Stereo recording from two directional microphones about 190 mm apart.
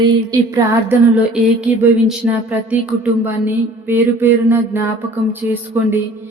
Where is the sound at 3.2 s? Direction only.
10° right (ahead or behind).